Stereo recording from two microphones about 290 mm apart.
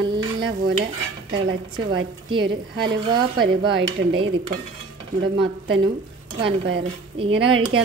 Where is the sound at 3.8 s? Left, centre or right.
Right.